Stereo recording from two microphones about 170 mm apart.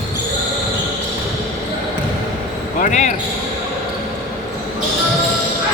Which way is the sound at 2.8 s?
45° left (ahead or behind).